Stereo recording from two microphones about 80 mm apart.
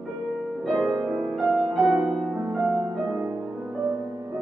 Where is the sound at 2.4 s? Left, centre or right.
Right.